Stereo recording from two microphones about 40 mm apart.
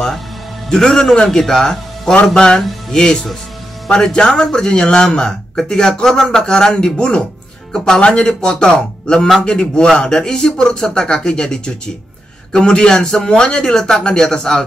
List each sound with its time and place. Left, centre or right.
0.7 s speech: centre